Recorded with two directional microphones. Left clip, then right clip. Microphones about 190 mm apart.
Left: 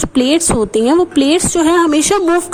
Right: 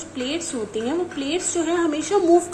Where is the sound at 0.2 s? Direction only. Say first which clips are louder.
Left 14 dB; 65° left (ahead or behind).